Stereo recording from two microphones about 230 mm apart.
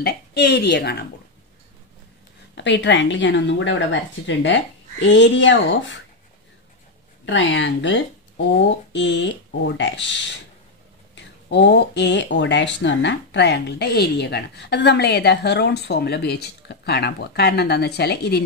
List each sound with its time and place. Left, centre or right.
0.0 s speech: left
2.5 s speech: left
7.2 s speech: left
11.5 s speech: left